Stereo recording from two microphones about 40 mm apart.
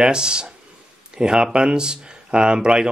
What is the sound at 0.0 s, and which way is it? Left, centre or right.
Speech, right.